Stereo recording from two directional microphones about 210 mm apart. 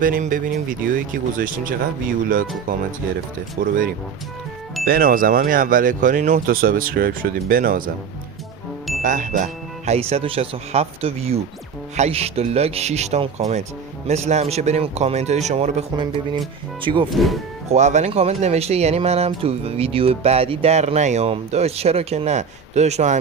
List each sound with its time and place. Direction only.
0.0 s speech: 40° right (ahead or behind)
2.7 s speech: 40° right (ahead or behind)
4.9 s speech: 45° right (ahead or behind)
9.0 s speech: 35° right (ahead or behind)
17.1 s speech: centre (ahead or behind)
17.7 s speech: 35° right (ahead or behind)